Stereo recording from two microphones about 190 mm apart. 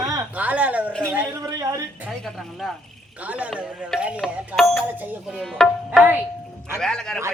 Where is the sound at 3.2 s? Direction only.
5° right (ahead or behind).